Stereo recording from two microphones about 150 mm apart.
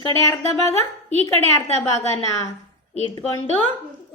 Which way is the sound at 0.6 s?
45° right (ahead or behind).